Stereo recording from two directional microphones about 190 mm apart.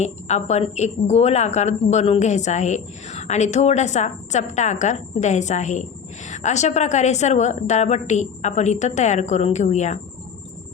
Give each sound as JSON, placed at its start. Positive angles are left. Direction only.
{"t": 0.0, "sound": "a woman's voice", "side_deg": 35}